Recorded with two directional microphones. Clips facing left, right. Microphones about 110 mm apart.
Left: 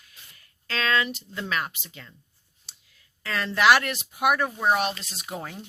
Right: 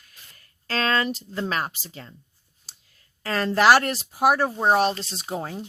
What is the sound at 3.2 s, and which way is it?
Speech, 40° right (ahead or behind).